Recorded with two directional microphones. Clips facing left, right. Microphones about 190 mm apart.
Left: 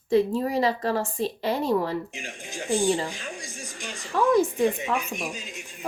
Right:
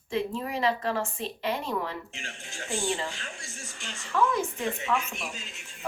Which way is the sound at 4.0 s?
35° left (ahead or behind).